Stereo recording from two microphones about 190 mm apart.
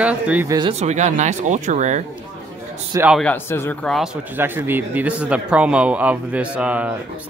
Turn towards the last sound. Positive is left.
turn(degrees=-5)  # may be behind; listen again after turning